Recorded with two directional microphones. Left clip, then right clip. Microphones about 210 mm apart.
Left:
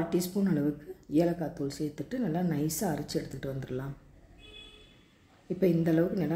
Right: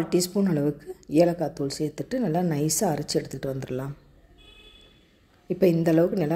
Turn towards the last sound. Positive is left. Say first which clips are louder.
# right 6 dB
turn(degrees=-35)  # may be behind; listen again after turning